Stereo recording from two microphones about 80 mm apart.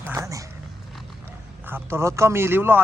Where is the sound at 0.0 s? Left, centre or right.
Right.